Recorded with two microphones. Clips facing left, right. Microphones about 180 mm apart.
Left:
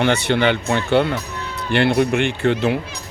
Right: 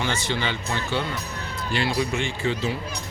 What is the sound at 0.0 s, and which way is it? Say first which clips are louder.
Speech: left 10 dB; 65° left (ahead or behind).